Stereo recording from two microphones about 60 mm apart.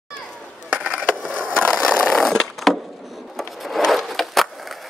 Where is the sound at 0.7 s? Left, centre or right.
Centre.